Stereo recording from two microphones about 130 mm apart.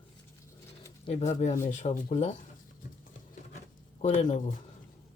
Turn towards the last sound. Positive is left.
turn(degrees=65)  # may be behind; listen again after turning